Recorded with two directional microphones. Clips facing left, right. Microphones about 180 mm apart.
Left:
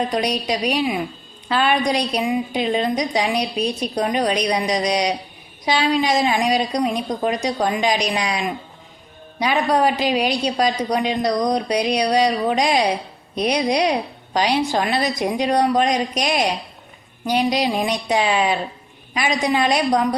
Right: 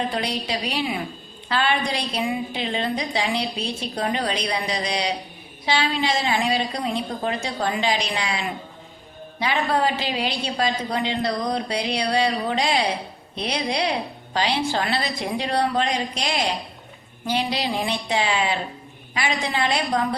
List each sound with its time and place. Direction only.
0.1 s a woman's voice: 15° left (ahead or behind)
9.4 s a woman's voice: 15° left (ahead or behind)